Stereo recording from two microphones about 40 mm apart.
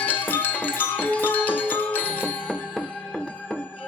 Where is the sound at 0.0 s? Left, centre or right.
Left.